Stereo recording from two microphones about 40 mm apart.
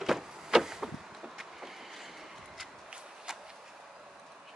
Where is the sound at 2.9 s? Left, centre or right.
Centre.